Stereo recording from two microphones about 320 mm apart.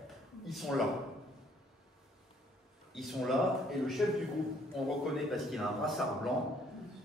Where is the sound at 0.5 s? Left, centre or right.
Centre.